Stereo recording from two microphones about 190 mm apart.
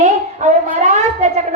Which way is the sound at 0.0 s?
40° right (ahead or behind).